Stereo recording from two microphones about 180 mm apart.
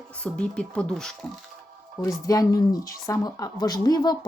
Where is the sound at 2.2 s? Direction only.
20° left (ahead or behind).